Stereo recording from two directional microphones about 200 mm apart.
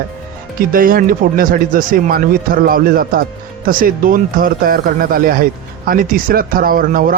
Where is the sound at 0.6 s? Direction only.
45° right (ahead or behind).